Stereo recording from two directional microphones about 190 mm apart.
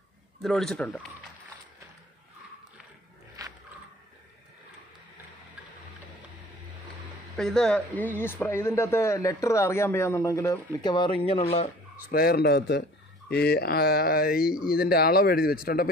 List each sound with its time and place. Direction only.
0.4 s speech: centre (ahead or behind)
3.4 s a sound: 20° right (ahead or behind)
7.3 s speech: 5° left (ahead or behind); by 11.7 s 35° left (ahead or behind)
12.1 s speech: 55° left (ahead or behind)
14.4 s speech: 5° right (ahead or behind)
14.8 s a man's voice: 55° left (ahead or behind)